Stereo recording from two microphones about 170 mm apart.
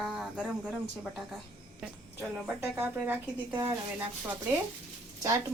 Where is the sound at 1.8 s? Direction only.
10° right (ahead or behind).